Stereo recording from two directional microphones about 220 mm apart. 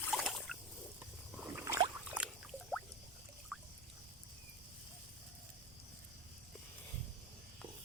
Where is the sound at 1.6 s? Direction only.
15° right (ahead or behind).